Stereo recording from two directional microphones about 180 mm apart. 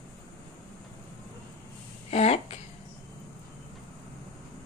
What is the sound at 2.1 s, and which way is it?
Speech, 35° left (ahead or behind).